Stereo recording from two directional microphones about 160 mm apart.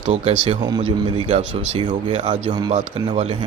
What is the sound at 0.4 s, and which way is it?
Speech, 30° right (ahead or behind).